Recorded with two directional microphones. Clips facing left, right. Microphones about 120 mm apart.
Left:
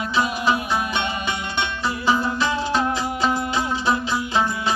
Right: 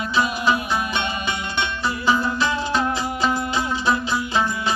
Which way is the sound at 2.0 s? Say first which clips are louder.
Even; 20° left (ahead or behind).